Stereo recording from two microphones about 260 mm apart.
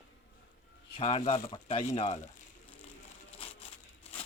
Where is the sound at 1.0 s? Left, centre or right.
Left.